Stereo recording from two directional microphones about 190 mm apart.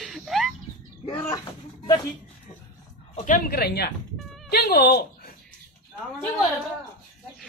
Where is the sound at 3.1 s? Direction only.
45° left (ahead or behind).